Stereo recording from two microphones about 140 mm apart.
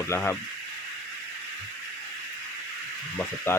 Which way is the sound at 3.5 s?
15° left (ahead or behind).